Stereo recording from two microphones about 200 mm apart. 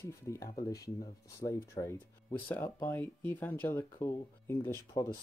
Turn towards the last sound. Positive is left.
turn(degrees=15)  # may be behind; listen again after turning